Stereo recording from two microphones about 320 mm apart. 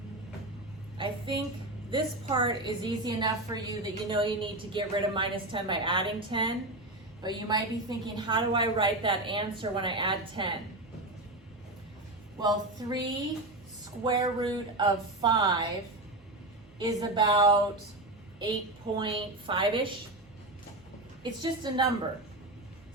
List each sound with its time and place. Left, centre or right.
0.9 s a woman's voice: centre
12.4 s a woman's voice: centre
16.7 s a woman's voice: centre
18.9 s a woman's voice: centre
21.2 s a woman's voice: centre